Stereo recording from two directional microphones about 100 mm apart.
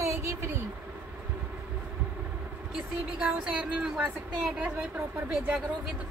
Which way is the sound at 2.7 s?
10° right (ahead or behind).